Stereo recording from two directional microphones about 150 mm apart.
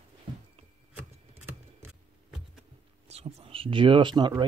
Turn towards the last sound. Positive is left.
turn(degrees=-30)  # may be behind; listen again after turning